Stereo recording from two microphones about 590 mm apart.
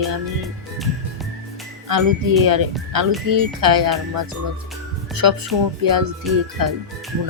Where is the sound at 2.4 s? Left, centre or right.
Right.